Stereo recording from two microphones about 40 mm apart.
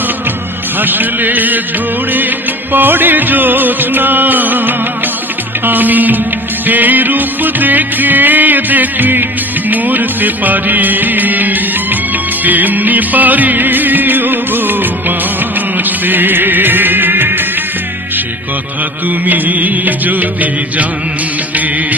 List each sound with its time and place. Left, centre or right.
0.8 s music: right
2.7 s music: right
19.2 s music: right